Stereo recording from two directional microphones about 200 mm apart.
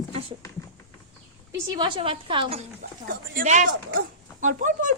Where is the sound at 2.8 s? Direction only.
45° right (ahead or behind).